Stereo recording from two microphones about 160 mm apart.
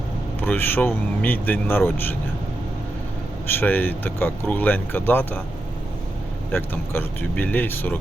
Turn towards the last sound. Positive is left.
turn(degrees=10)  # may be behind; listen again after turning